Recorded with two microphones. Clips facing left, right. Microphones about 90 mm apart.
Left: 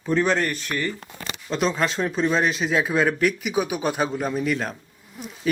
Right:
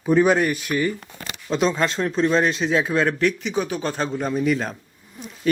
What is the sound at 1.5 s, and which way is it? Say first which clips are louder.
A man's voice: right 2 dB; centre (ahead or behind).